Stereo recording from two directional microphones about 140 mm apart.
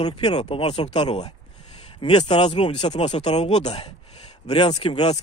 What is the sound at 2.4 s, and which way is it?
Speech, 50° left (ahead or behind).